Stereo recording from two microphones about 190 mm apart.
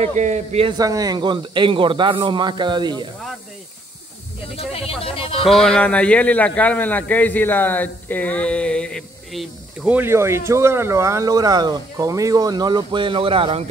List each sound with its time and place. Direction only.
0.2 s a man's voice: 35° right (ahead or behind)
4.6 s speech: 30° left (ahead or behind)
5.5 s a man's voice: 5° left (ahead or behind); by 13.7 s 30° right (ahead or behind)